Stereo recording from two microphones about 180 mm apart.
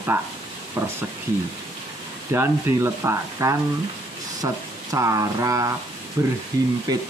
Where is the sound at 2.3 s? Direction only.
15° right (ahead or behind).